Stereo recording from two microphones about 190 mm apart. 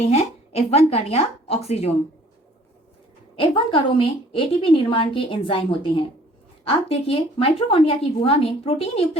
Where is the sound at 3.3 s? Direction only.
25° left (ahead or behind).